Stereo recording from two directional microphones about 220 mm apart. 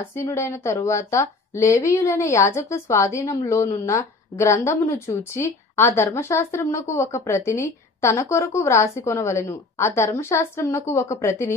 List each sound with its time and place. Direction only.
0.0 s speech: 10° left (ahead or behind)